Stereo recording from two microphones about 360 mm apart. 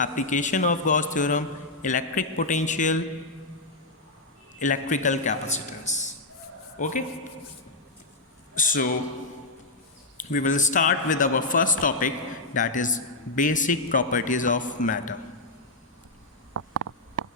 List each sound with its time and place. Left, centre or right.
0.0 s a man's voice: left
4.6 s a man's voice: left
8.5 s a man's voice: left
10.2 s a man's voice: left
16.6 s a sound: right